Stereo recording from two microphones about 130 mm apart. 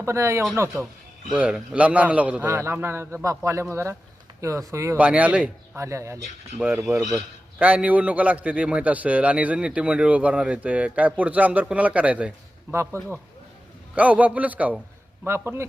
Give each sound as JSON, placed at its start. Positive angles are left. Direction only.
{"t": 0.0, "sound": "a man's voice", "side_deg": -20}
{"t": 1.3, "sound": "a man's voice", "side_deg": -5}
{"t": 4.9, "sound": "a man's voice", "side_deg": -10}
{"t": 5.7, "sound": "a man's voice", "side_deg": -20}
{"t": 6.6, "sound": "a man's voice", "side_deg": -10}
{"t": 12.7, "sound": "a man's voice", "side_deg": -20}